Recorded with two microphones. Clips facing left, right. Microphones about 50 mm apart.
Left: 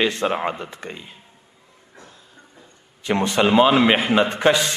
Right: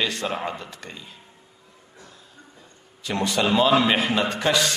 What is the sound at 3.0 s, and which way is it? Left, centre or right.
A man's voice, left.